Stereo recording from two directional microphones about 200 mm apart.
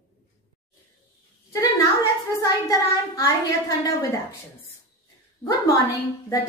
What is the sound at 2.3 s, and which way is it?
A child's voice, 15° left (ahead or behind).